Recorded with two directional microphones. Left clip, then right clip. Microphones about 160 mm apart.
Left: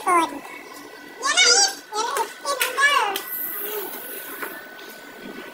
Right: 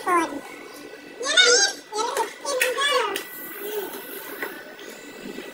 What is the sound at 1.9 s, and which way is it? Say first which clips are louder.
Children playing: left 1 dB; centre (ahead or behind).